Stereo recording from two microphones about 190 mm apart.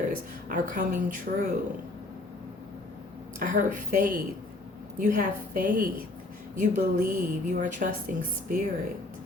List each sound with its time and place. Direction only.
0.4 s a woman's voice: 40° right (ahead or behind)
3.3 s a woman's voice: 45° right (ahead or behind)